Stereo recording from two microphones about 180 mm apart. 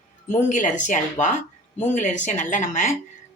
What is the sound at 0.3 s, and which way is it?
A woman's voice, 45° left (ahead or behind).